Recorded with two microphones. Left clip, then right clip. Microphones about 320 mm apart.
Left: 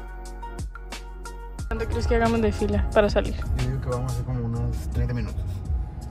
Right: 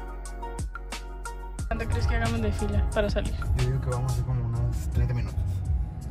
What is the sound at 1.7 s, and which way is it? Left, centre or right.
Speech, centre.